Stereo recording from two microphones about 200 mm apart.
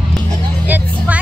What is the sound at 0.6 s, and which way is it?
Vehicle, 10° right (ahead or behind).